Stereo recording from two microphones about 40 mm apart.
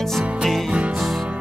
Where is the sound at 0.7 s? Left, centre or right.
Right.